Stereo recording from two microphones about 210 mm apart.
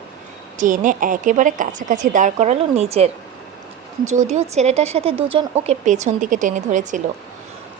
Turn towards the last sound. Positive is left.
turn(degrees=-35)  # may be behind; listen again after turning